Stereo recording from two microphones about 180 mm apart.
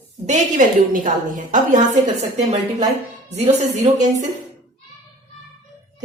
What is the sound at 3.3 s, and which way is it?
Speech, 40° right (ahead or behind).